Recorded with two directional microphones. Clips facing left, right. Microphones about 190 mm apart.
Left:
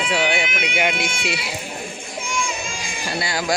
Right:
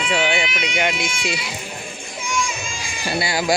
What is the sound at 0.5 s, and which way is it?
Speech, 55° left (ahead or behind).